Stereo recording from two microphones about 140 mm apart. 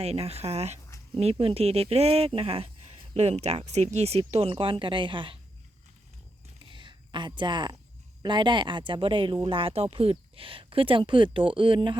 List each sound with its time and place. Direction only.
0.0 s speech: 45° right (ahead or behind)
6.7 s a sound: 35° right (ahead or behind)
8.2 s speech: 35° right (ahead or behind)